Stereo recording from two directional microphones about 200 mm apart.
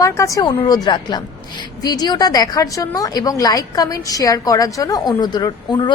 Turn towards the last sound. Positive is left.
turn(degrees=20)  # may be behind; listen again after turning